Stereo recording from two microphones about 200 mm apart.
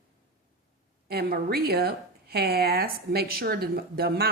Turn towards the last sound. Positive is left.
turn(degrees=-50)  # may be behind; listen again after turning